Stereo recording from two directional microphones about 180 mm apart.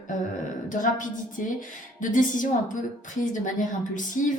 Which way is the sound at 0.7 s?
45° left (ahead or behind).